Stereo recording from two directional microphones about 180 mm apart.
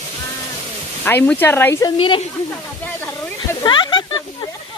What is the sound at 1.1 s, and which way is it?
Speech, 10° left (ahead or behind).